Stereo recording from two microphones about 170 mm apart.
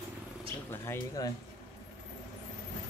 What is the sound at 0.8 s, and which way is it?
Speech, 15° left (ahead or behind).